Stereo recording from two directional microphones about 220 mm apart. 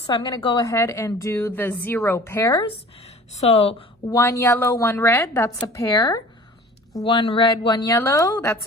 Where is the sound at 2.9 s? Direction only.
30° left (ahead or behind).